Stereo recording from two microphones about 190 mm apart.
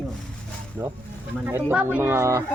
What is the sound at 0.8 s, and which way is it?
Speech, 15° right (ahead or behind).